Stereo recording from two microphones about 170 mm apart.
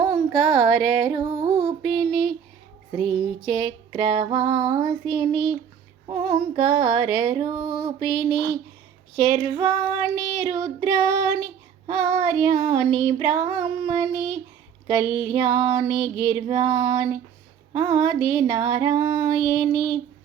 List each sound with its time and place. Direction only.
0.0 s a sound: 25° right (ahead or behind)
0.7 s music: centre (ahead or behind)
0.9 s child singing: 25° right (ahead or behind)
1.8 s child singing: centre (ahead or behind)
3.4 s child singing: 25° right (ahead or behind)